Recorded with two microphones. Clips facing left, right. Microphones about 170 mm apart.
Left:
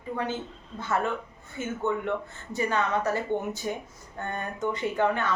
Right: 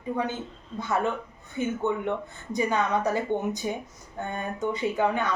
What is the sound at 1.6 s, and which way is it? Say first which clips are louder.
A woman's voice: right 2 dB; 15° right (ahead or behind).